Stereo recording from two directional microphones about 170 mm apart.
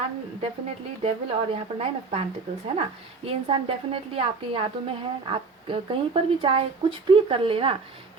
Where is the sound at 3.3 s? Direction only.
35° right (ahead or behind).